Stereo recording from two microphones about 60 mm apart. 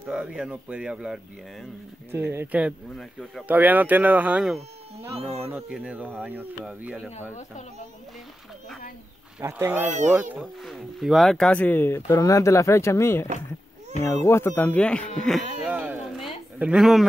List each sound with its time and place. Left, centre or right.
0.1 s speech: centre
2.1 s speech: right
3.0 s speech: centre
3.4 s speech: right
6.1 s speech: right
9.4 s speech: right
10.4 s speech: centre
11.4 s speech: left
11.9 s speech: left
14.5 s speech: left
15.6 s a sound: centre
16.7 s speech: centre